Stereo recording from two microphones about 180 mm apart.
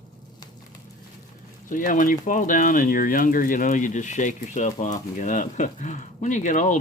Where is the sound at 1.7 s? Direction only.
45° left (ahead or behind).